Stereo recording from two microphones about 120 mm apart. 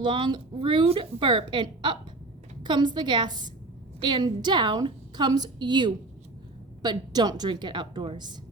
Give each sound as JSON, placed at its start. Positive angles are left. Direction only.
{"t": 0.0, "sound": "a woman's voice", "side_deg": -40}